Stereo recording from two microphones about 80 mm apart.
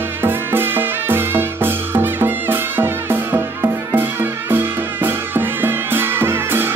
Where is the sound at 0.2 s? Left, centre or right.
Right.